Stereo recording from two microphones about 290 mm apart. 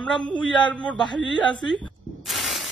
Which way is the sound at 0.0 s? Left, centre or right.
Centre.